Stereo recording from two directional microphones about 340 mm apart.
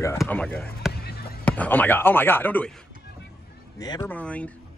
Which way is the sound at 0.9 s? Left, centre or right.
Left.